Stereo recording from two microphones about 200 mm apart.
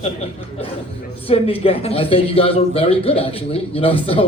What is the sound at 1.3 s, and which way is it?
Speech, 30° left (ahead or behind).